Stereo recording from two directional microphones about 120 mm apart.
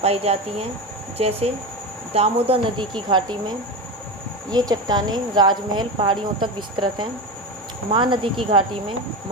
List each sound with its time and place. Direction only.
0.0 s speech: 60° right (ahead or behind)
2.7 s speech: 40° right (ahead or behind)
4.5 s speech: 35° right (ahead or behind)